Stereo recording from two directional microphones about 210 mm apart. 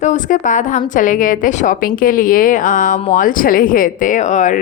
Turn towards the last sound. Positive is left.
turn(degrees=35)  # may be behind; listen again after turning